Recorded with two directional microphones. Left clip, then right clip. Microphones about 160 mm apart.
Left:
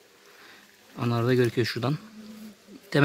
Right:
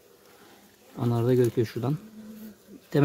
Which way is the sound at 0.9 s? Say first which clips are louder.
Even; 15° right (ahead or behind).